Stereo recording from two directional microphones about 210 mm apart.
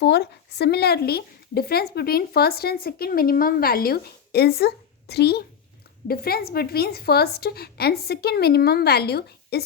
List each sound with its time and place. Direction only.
0.0 s speech: 50° left (ahead or behind)